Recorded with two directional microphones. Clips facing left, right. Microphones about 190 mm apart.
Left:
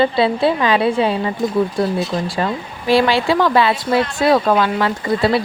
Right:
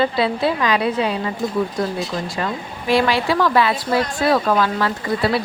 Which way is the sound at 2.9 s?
30° left (ahead or behind).